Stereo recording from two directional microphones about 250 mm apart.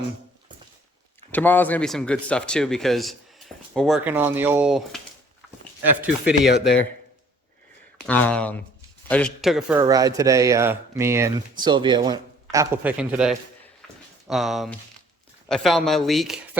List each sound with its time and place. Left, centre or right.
1.3 s speech: centre
6.5 s speech: left
8.0 s speech: centre
9.8 s speech: centre
13.8 s a sound: centre
15.4 s speech: centre